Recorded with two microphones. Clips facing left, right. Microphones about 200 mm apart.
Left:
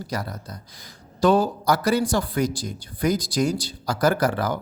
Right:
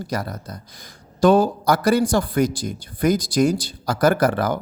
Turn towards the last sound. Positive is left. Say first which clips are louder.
# right 3 dB
turn(degrees=-55)  # may be behind; listen again after turning